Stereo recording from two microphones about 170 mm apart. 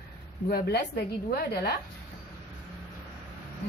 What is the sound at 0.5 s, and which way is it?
Speech, 70° left (ahead or behind).